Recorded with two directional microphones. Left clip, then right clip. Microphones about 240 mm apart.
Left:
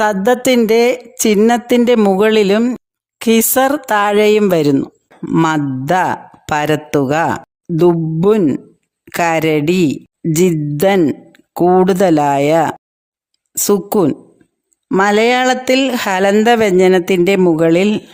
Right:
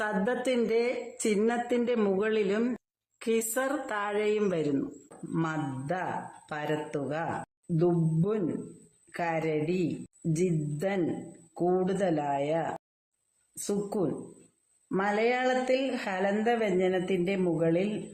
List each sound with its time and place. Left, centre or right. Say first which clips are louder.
0.0 s speech: left 17 dB; left
13.7 s speech: left 17 dB; left